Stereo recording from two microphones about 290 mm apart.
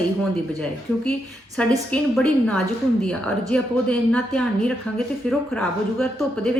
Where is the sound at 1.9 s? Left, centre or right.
Centre.